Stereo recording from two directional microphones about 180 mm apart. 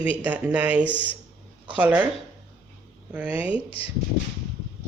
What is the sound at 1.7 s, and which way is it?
Speech, 10° right (ahead or behind).